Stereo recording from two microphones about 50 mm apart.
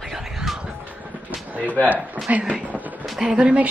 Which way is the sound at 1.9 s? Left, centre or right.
Right.